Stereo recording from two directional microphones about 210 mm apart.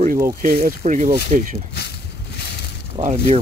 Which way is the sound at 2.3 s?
50° left (ahead or behind).